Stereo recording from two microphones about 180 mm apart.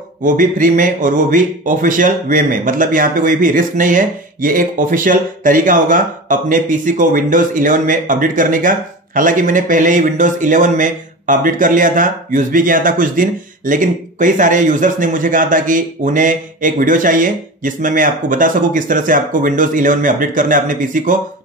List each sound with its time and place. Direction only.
0.2 s speech: 50° right (ahead or behind)